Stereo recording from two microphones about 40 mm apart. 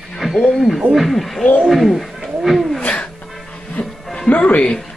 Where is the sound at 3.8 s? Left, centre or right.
Left.